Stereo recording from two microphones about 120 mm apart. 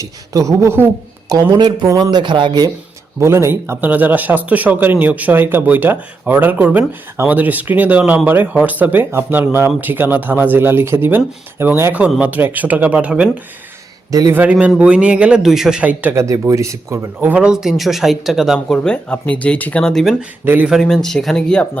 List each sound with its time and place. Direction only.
0.0 s speech: 25° right (ahead or behind)
1.3 s speech: 35° right (ahead or behind)
3.2 s speech: 20° right (ahead or behind)
14.1 s speech: 30° right (ahead or behind)
14.3 s speech: 10° right (ahead or behind)
16.2 s speech: 30° right (ahead or behind); by 18.8 s 5° right (ahead or behind)
18.8 s speech: 10° left (ahead or behind)
20.4 s speech: 15° right (ahead or behind)
20.7 s speech: centre (ahead or behind)